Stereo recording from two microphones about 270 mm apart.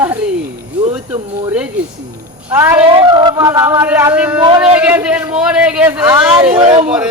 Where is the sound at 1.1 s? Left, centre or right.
Centre.